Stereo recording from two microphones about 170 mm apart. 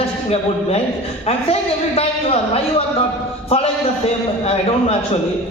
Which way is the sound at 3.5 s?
35° left (ahead or behind).